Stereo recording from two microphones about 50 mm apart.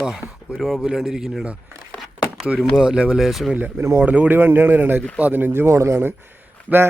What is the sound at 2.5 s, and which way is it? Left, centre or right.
Speech, right.